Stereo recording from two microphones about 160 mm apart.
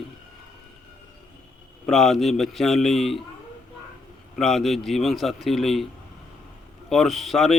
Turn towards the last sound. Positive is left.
turn(degrees=0)  # may be behind; listen again after turning